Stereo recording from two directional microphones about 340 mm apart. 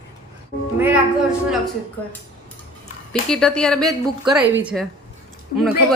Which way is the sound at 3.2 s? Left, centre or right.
Centre.